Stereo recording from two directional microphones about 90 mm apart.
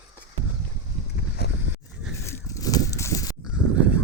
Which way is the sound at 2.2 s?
40° left (ahead or behind).